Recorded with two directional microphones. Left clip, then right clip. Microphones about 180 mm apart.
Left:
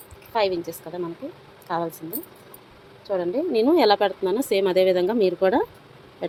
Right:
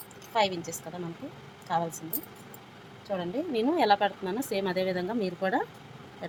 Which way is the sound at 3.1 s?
35° left (ahead or behind).